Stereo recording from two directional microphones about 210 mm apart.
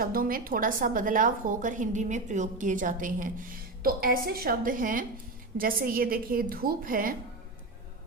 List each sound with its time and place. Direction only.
0.0 s a woman's voice: 40° right (ahead or behind)